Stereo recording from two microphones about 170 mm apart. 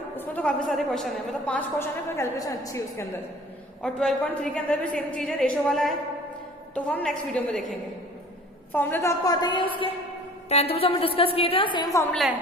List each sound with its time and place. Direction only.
0.2 s a woman's voice: 10° left (ahead or behind)
3.8 s a woman's voice: 5° left (ahead or behind)
8.7 s a woman's voice: 10° left (ahead or behind)